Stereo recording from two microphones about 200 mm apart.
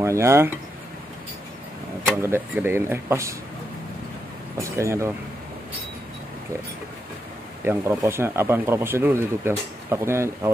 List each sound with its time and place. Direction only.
0.0 s speech: 15° right (ahead or behind)
2.2 s speech: 10° right (ahead or behind)
4.6 s speech: 15° right (ahead or behind)
7.6 s speech: 10° right (ahead or behind)